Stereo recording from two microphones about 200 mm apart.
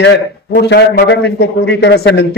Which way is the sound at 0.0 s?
55° left (ahead or behind).